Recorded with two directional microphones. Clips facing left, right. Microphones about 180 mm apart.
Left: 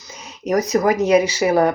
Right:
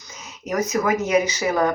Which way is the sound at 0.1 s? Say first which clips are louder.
Left 7 dB; 30° left (ahead or behind).